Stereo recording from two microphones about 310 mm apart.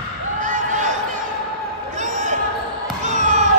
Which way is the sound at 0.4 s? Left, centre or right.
Right.